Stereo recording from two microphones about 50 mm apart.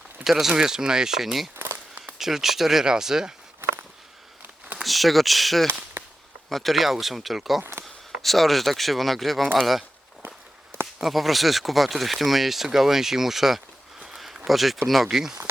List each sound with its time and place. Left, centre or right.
0.3 s speech: centre
1.5 s a sound: right
2.1 s speech: centre
4.8 s speech: centre
6.0 s whip: right
6.5 s speech: centre
7.6 s speech: right
8.2 s speech: centre
10.2 s walk: right
11.0 s speech: centre
14.0 s a sound: centre
14.4 s speech: centre